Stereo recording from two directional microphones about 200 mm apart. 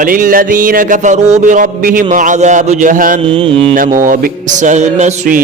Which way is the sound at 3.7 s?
40° right (ahead or behind).